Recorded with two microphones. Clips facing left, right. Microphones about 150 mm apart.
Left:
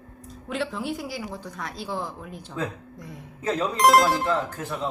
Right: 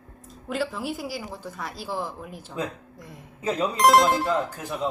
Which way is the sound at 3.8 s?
Centre (ahead or behind).